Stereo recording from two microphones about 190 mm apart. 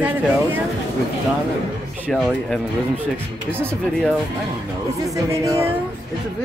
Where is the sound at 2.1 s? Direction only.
Centre (ahead or behind).